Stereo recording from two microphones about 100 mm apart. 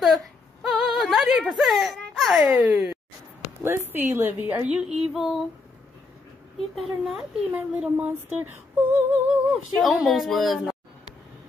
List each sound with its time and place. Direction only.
0.0 s a sound: centre (ahead or behind)
2.4 s female singing: 15° right (ahead or behind)
6.7 s a woman's voice: centre (ahead or behind)
7.5 s female singing: 15° right (ahead or behind)
9.8 s a woman's voice: centre (ahead or behind)